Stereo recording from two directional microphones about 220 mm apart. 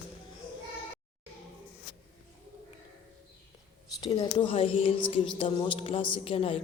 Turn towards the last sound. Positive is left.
turn(degrees=25)  # may be behind; listen again after turning